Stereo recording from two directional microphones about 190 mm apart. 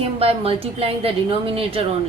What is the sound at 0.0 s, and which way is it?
A woman's voice, 30° right (ahead or behind).